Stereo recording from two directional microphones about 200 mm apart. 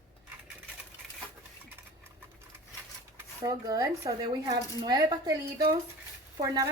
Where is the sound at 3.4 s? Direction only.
15° right (ahead or behind).